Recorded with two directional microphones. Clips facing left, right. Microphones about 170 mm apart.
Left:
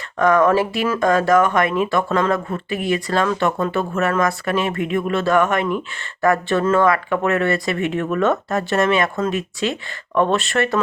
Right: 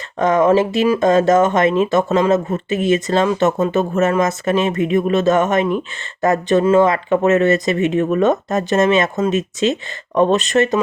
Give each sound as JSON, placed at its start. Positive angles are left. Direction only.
{"t": 0.2, "sound": "speech", "side_deg": -20}